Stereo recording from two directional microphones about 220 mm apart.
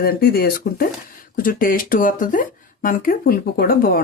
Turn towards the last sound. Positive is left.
turn(degrees=40)  # may be behind; listen again after turning